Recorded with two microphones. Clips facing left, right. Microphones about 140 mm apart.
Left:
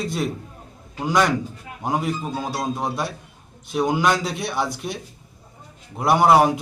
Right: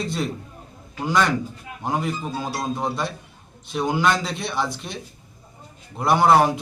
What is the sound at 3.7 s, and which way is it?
Speech, centre (ahead or behind).